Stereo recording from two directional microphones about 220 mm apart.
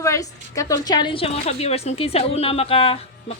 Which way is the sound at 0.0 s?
15° left (ahead or behind).